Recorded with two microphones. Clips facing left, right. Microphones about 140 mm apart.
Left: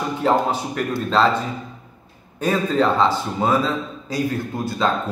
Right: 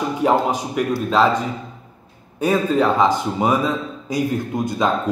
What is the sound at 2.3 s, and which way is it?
A man's voice, 10° right (ahead or behind).